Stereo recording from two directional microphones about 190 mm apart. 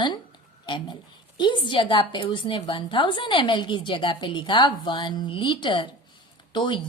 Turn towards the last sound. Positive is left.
turn(degrees=25)  # may be behind; listen again after turning